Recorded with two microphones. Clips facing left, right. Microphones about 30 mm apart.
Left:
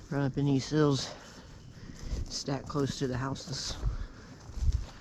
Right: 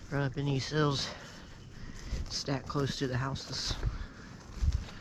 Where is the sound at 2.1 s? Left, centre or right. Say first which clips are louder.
Even; centre.